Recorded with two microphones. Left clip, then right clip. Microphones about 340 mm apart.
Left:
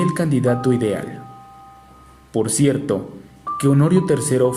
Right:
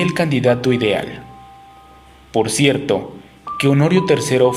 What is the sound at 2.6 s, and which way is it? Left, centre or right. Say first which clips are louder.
Speech: right 2 dB; right.